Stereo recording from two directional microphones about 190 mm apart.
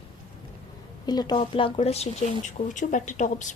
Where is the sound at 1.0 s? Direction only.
20° left (ahead or behind); by 3.6 s 40° left (ahead or behind).